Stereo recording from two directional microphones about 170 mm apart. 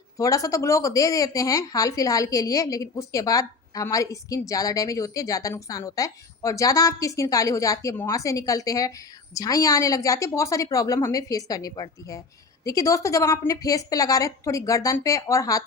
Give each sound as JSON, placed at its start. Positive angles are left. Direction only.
{"t": 0.2, "sound": "speech", "side_deg": 20}